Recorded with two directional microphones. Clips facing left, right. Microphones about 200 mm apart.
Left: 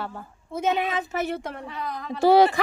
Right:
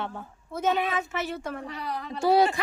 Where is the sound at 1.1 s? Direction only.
40° left (ahead or behind).